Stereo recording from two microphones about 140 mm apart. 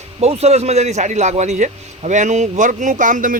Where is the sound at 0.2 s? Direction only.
50° right (ahead or behind).